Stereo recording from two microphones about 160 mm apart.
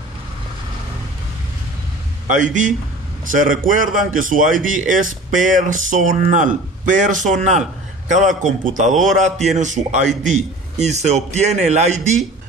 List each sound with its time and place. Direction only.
2.2 s speech: 50° right (ahead or behind)